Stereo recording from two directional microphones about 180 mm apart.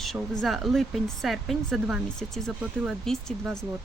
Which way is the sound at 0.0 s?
Centre (ahead or behind).